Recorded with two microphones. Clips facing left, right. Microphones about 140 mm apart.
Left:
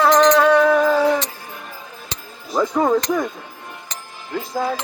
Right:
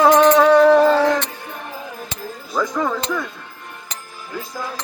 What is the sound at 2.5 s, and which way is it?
Speech, 30° left (ahead or behind).